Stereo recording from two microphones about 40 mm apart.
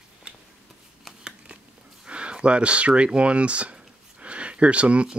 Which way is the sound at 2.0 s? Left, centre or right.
Right.